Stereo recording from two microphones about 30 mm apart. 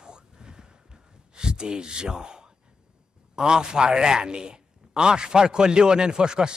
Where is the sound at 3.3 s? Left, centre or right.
Right.